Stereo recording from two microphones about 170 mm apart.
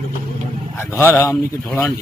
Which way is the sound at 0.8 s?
15° left (ahead or behind).